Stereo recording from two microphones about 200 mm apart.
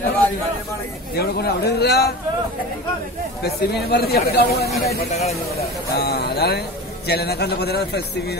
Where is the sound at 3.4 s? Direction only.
55° left (ahead or behind).